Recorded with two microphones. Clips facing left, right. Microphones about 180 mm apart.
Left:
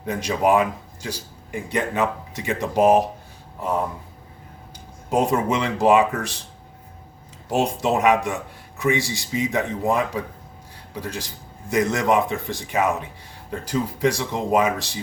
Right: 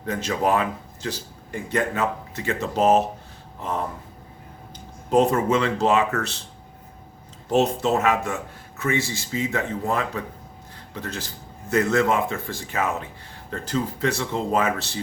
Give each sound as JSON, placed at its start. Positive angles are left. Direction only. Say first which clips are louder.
{"t": 0.0, "sound": "speech", "louder": "left 2 dB", "side_deg": 15}
{"t": 5.1, "sound": "speech", "louder": "right 2 dB", "side_deg": 15}
{"t": 7.5, "sound": "speech", "louder": "right 1 dB", "side_deg": 15}